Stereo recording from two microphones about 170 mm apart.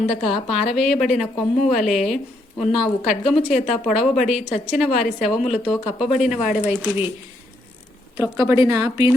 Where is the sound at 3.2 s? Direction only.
5° right (ahead or behind).